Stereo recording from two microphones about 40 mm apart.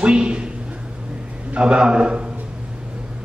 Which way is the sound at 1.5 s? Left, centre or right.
Right.